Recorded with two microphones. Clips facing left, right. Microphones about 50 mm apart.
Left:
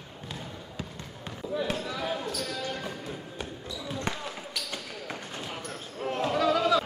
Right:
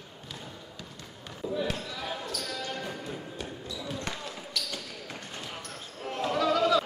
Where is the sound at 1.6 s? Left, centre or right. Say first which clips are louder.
Left 3 dB; centre.